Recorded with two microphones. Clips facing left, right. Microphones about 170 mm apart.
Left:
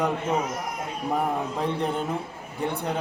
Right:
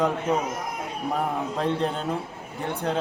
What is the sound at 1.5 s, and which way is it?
Speech, 15° left (ahead or behind).